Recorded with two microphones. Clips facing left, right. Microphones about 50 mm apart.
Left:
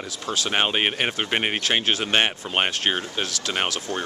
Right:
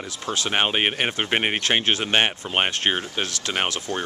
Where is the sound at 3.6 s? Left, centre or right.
Right.